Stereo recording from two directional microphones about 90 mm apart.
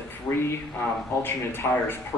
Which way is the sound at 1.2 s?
25° left (ahead or behind).